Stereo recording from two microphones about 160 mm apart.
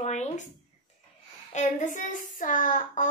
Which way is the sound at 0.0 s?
45° left (ahead or behind).